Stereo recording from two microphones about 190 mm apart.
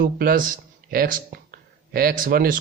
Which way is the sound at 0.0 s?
45° right (ahead or behind).